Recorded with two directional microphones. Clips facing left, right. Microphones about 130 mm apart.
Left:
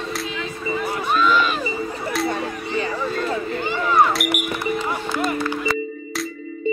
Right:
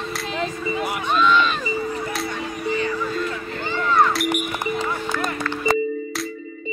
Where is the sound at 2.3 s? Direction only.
30° left (ahead or behind).